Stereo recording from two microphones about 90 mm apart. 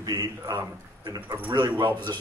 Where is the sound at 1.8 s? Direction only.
60° right (ahead or behind).